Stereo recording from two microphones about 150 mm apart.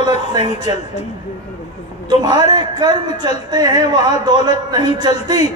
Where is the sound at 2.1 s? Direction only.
30° right (ahead or behind).